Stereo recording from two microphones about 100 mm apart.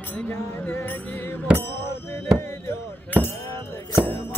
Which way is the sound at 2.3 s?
20° left (ahead or behind).